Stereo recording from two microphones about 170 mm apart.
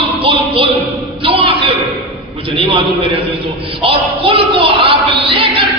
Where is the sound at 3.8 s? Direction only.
30° right (ahead or behind).